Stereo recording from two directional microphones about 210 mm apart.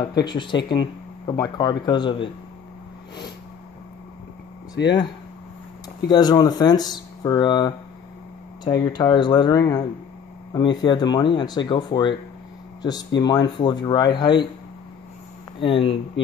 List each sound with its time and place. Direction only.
0.1 s speech: 20° left (ahead or behind)
4.8 s speech: 60° left (ahead or behind)
6.0 s speech: 20° left (ahead or behind)
15.6 s speech: 25° left (ahead or behind)